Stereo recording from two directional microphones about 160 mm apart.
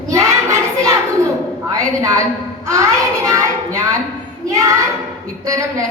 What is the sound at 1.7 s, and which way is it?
A woman's voice, 20° right (ahead or behind).